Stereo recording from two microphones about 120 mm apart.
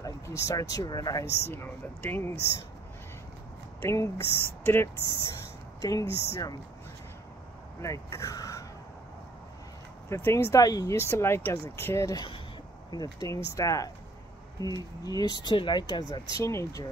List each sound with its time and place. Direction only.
0.0 s speech: 25° left (ahead or behind)
3.8 s speech: 25° left (ahead or behind)
5.9 s speech: 30° left (ahead or behind)
7.8 s speech: 25° left (ahead or behind)
10.0 s speech: 20° left (ahead or behind)
11.0 s speech: 20° left (ahead or behind); by 16.2 s 35° left (ahead or behind)
16.3 s speech: 25° left (ahead or behind)